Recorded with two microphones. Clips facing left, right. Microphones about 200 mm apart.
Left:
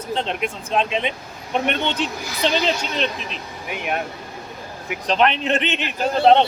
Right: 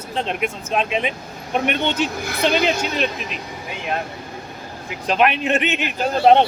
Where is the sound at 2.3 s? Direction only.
55° right (ahead or behind).